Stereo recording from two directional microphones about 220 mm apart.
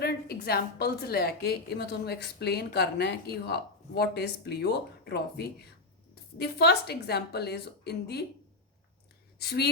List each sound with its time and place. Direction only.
0.0 s a woman's voice: 45° left (ahead or behind)
9.4 s a woman's voice: 45° left (ahead or behind)